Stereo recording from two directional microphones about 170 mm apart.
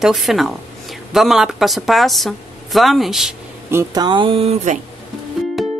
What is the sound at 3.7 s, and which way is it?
Speech, 15° right (ahead or behind).